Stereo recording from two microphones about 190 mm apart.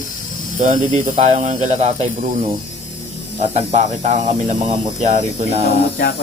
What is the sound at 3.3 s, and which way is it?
Speech, 35° right (ahead or behind).